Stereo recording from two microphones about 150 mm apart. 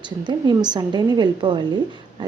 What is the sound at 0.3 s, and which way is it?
A woman's voice, 30° right (ahead or behind).